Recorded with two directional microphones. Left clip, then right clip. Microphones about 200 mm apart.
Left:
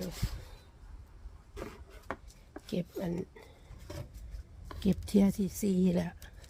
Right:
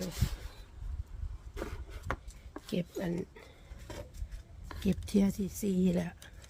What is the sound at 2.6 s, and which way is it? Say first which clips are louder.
Speech: even; 5° left (ahead or behind).